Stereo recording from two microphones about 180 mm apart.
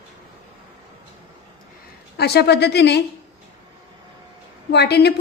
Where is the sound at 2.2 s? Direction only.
65° left (ahead or behind).